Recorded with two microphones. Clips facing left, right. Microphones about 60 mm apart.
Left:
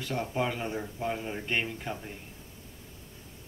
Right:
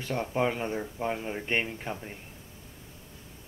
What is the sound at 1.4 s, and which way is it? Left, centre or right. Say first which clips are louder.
Speech: right 2 dB; right.